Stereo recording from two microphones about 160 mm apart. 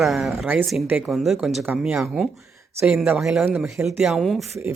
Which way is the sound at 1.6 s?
15° right (ahead or behind).